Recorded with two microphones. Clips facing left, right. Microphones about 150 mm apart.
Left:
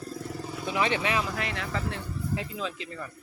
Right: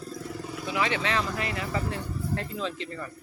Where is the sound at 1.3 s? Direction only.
Centre (ahead or behind).